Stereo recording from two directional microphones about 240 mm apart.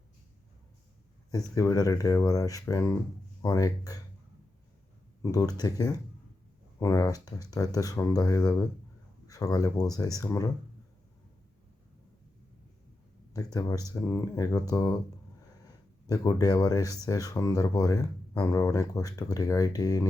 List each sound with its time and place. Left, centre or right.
1.3 s speech: centre
5.2 s speech: centre
13.3 s speech: centre
16.0 s speech: centre